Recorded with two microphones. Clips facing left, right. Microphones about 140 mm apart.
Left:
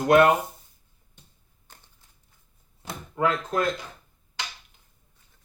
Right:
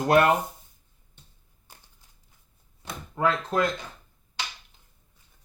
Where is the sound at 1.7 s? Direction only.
10° right (ahead or behind).